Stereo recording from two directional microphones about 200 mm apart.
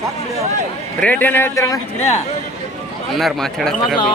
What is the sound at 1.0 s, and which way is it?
Speech, 10° left (ahead or behind).